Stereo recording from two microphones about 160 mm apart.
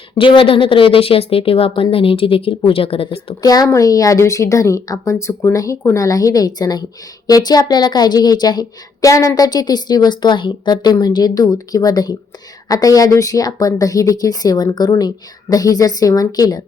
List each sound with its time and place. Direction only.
0.2 s a woman's voice: 35° left (ahead or behind)
3.4 s a woman's voice: 25° left (ahead or behind)